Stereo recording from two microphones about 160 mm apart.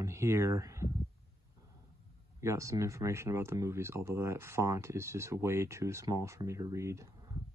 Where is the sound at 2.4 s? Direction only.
20° right (ahead or behind).